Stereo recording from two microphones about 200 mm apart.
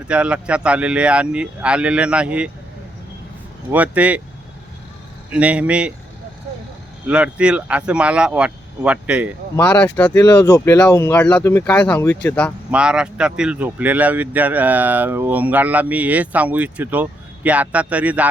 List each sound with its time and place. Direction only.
0.1 s speech: 5° right (ahead or behind)
3.7 s speech: 5° right (ahead or behind)
5.3 s speech: 5° right (ahead or behind)
7.1 s speech: 5° right (ahead or behind)
9.6 s speech: 10° left (ahead or behind)
12.7 s speech: 5° right (ahead or behind)